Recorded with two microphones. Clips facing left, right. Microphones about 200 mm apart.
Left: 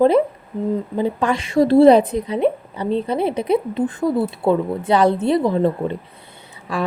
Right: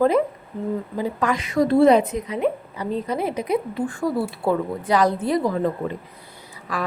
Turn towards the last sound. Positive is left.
turn(degrees=30)  # may be behind; listen again after turning